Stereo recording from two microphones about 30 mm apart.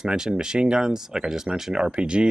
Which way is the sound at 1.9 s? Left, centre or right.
Right.